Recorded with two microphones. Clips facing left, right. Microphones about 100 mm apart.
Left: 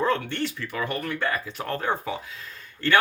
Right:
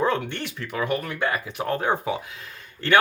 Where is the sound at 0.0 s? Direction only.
15° right (ahead or behind).